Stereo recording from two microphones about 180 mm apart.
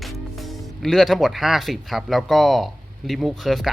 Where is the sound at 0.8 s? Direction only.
Centre (ahead or behind).